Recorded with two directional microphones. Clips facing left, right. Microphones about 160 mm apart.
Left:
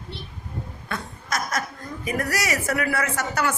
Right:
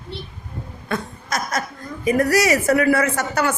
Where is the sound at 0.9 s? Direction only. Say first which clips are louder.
Right 4 dB; 25° right (ahead or behind).